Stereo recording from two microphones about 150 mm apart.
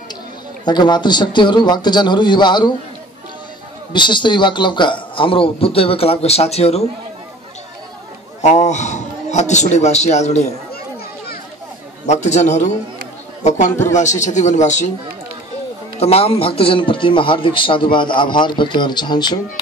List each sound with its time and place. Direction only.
0.7 s a man's voice: 30° left (ahead or behind)
3.9 s a man's voice: 30° left (ahead or behind)
8.4 s a man's voice: 50° left (ahead or behind)
12.1 s a man's voice: 50° left (ahead or behind)
16.0 s a man's voice: 40° left (ahead or behind)